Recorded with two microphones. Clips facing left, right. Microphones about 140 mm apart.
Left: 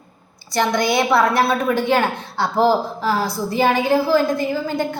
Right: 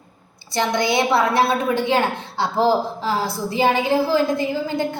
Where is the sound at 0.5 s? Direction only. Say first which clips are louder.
Left 1 dB; 25° right (ahead or behind).